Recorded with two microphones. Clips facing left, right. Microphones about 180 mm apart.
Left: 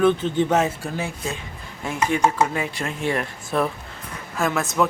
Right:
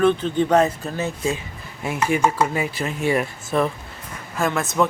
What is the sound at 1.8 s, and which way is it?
Speech, 10° right (ahead or behind).